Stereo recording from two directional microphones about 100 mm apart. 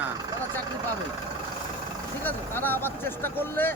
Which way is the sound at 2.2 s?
20° left (ahead or behind).